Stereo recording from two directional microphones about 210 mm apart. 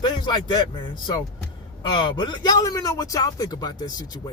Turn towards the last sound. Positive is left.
turn(degrees=20)  # may be behind; listen again after turning